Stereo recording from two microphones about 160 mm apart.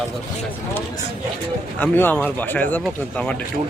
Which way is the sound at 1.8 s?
10° left (ahead or behind).